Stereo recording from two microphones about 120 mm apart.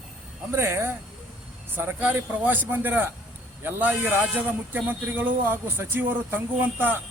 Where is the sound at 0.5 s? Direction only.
20° right (ahead or behind).